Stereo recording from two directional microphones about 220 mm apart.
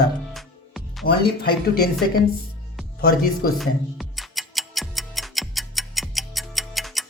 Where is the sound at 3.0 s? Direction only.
40° left (ahead or behind).